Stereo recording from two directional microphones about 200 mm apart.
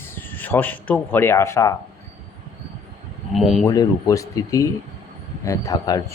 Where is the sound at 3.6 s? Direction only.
15° left (ahead or behind).